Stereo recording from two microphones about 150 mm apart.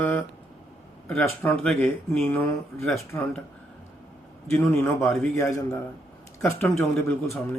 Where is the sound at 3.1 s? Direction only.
20° left (ahead or behind).